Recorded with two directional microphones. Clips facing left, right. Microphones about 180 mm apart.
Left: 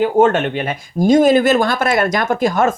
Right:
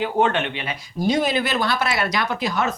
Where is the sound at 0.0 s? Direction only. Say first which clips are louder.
Left 7 dB; 45° left (ahead or behind).